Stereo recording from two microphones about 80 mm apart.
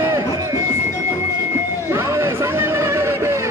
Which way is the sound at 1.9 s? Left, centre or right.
Right.